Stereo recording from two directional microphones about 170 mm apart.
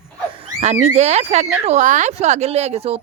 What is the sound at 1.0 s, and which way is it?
Speech, 40° right (ahead or behind).